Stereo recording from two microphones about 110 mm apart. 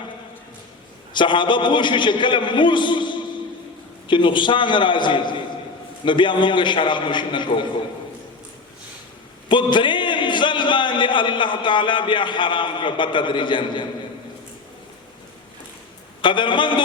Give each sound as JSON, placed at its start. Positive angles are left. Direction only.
{"t": 1.1, "sound": "a man's voice", "side_deg": 45}
{"t": 9.5, "sound": "a man's voice", "side_deg": 45}
{"t": 16.2, "sound": "a man's voice", "side_deg": 45}